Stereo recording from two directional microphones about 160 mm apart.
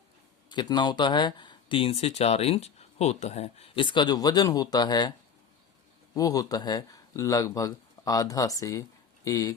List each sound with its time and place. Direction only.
0.5 s speech: 30° left (ahead or behind)
6.1 s speech: 20° left (ahead or behind)